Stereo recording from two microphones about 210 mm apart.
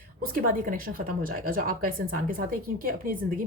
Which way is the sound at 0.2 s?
45° right (ahead or behind).